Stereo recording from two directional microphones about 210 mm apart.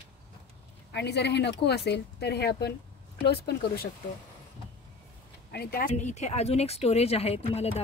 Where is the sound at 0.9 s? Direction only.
55° left (ahead or behind).